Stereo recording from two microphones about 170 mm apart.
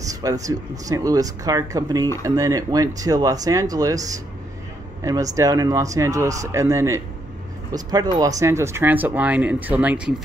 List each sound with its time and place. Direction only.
0.0 s speech: 20° right (ahead or behind)